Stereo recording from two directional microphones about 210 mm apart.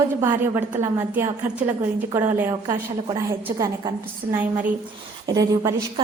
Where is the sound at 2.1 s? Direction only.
15° right (ahead or behind).